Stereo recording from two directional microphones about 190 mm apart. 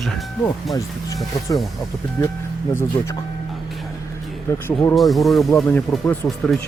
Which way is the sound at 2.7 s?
15° left (ahead or behind).